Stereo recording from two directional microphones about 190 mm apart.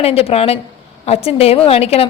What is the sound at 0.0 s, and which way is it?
A woman's voice, 30° left (ahead or behind).